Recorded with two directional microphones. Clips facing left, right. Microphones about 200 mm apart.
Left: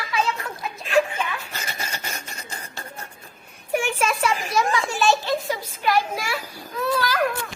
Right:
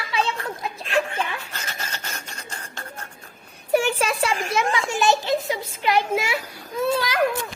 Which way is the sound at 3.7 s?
35° right (ahead or behind).